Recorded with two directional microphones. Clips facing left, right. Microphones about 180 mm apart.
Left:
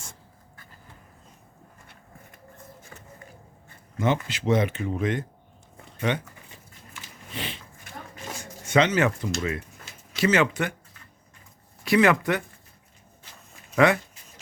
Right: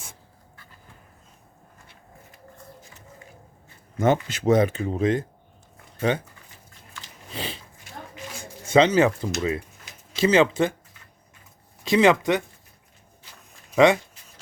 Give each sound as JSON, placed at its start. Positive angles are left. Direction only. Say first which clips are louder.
{"t": 2.9, "sound": "a sound", "louder": "left 4 dB", "side_deg": 60}
{"t": 3.9, "sound": "speech", "louder": "right 4 dB", "side_deg": -45}
{"t": 7.3, "sound": "dog", "louder": "right 2 dB", "side_deg": -35}
{"t": 8.6, "sound": "speech", "louder": "right 4 dB", "side_deg": -30}
{"t": 11.9, "sound": "speech", "louder": "right 2 dB", "side_deg": -20}
{"t": 13.7, "sound": "speech", "louder": "right 3 dB", "side_deg": -20}